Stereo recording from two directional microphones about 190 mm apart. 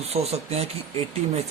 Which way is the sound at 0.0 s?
35° right (ahead or behind).